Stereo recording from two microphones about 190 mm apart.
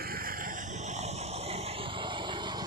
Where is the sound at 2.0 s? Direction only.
25° right (ahead or behind).